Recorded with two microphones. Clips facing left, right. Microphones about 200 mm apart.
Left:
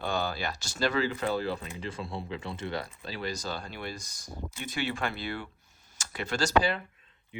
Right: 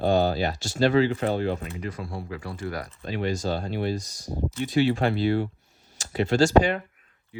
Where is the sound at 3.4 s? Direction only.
40° right (ahead or behind).